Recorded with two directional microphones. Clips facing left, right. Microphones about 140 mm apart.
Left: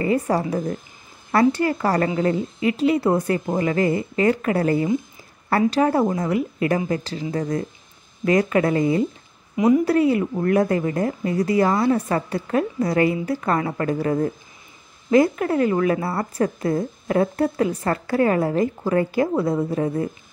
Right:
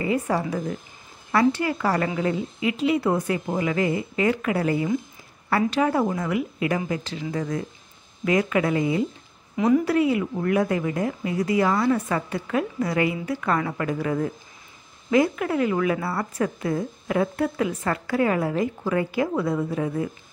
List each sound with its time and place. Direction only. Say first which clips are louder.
0.0 s a woman's voice: left 3 dB; 40° left (ahead or behind)